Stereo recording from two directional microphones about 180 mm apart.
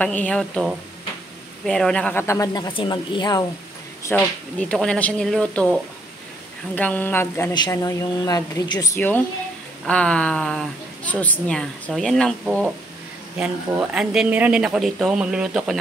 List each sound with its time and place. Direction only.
0.0 s a woman's voice: 5° left (ahead or behind); by 3.4 s 25° left (ahead or behind)
4.0 s a woman's voice: 10° left (ahead or behind)
7.5 s a woman's voice: 20° left (ahead or behind); by 15.8 s 5° right (ahead or behind)